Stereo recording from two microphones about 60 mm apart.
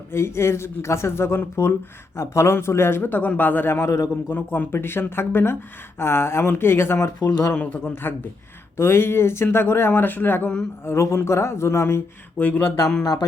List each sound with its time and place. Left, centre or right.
0.1 s speech: left
3.8 s a man's voice: left
4.3 s speech: left
7.5 s speech: left
8.8 s speech: left
10.8 s speech: left
12.4 s speech: left